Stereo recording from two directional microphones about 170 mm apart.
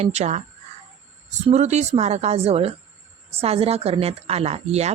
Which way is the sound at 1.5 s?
40° right (ahead or behind).